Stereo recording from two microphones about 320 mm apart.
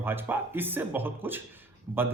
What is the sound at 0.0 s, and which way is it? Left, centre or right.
A man's voice, centre.